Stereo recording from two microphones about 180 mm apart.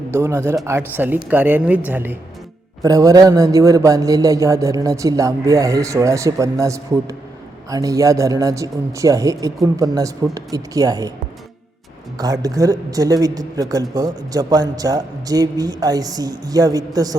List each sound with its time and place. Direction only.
0.1 s a man's voice: 15° right (ahead or behind)
12.1 s a man's voice: 20° right (ahead or behind)